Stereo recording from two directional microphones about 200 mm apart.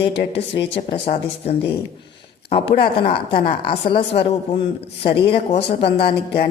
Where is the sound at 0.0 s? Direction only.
60° left (ahead or behind).